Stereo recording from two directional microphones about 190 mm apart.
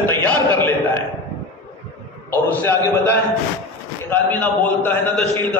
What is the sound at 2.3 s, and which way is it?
A man's voice, 10° left (ahead or behind).